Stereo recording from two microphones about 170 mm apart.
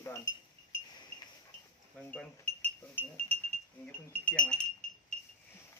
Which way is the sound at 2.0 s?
10° left (ahead or behind).